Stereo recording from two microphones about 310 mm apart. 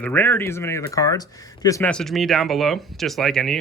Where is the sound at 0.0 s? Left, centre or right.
Centre.